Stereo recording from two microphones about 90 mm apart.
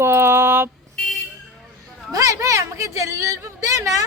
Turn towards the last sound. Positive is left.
turn(degrees=-35)  # may be behind; listen again after turning